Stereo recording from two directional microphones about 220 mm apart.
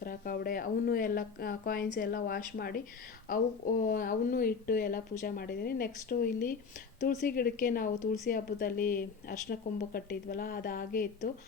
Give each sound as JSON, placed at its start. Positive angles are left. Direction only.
{"t": 0.0, "sound": "speech", "side_deg": 40}